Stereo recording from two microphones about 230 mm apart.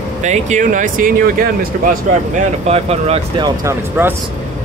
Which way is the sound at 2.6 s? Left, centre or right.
Right.